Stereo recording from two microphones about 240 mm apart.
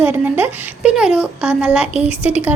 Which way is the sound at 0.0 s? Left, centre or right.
Centre.